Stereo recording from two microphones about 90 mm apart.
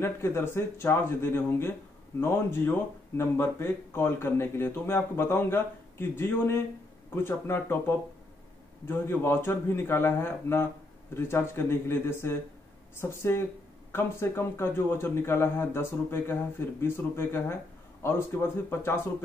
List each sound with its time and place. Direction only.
0.0 s speech: 25° left (ahead or behind)
8.8 s speech: 25° left (ahead or behind)